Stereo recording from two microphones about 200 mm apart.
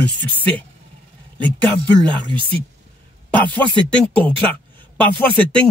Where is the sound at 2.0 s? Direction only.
25° right (ahead or behind).